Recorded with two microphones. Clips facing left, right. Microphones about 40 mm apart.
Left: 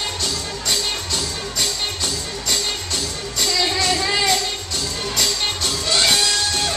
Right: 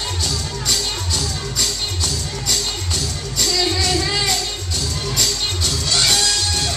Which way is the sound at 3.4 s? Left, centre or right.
Centre.